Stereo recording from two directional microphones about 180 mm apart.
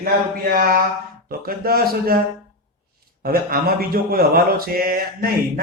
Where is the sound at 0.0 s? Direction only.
55° right (ahead or behind).